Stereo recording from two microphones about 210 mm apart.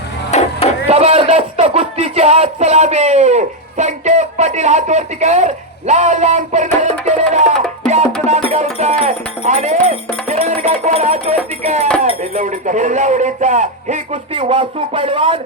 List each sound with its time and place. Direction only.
0.3 s chop: 30° left (ahead or behind)
0.9 s speech: 30° right (ahead or behind)